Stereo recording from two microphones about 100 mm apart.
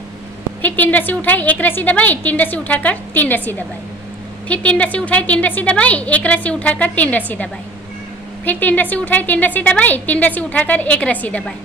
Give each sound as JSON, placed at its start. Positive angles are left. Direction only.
{"t": 0.6, "sound": "a woman's voice", "side_deg": 15}
{"t": 8.5, "sound": "a woman's voice", "side_deg": 15}